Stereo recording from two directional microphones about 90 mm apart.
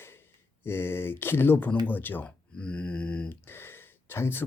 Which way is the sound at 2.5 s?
10° left (ahead or behind).